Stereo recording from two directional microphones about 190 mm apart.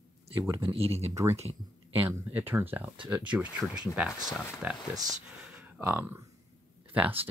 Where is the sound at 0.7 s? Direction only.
30° right (ahead or behind).